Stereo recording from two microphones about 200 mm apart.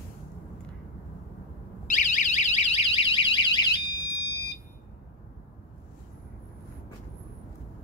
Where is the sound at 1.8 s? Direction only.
35° left (ahead or behind).